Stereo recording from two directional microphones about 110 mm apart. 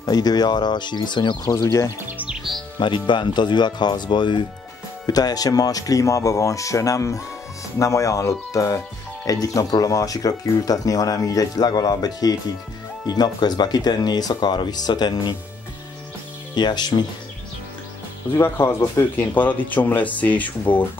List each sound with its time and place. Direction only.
0.0 s speech: 35° left (ahead or behind)
1.5 s speech: 25° left (ahead or behind)
2.8 s speech: 45° left (ahead or behind)
16.5 s speech: 40° left (ahead or behind)
18.3 s speech: 20° left (ahead or behind)